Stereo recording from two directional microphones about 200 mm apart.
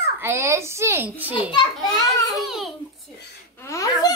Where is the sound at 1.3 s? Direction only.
25° left (ahead or behind).